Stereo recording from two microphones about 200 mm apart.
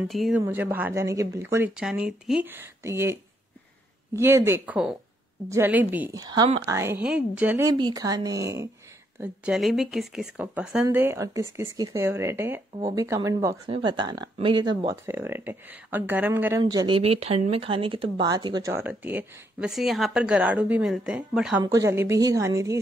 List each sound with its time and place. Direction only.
0.1 s speech: centre (ahead or behind)
0.4 s speech: 10° right (ahead or behind)
6.1 s speech: 20° right (ahead or behind)
7.7 s speech: 20° right (ahead or behind)
9.2 s speech: 5° right (ahead or behind)
16.7 s speech: 25° right (ahead or behind); by 21.6 s 5° right (ahead or behind)
21.6 s speech: 15° right (ahead or behind)